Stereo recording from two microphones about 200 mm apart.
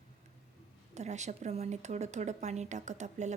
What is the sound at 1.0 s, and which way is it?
Speech, 35° right (ahead or behind).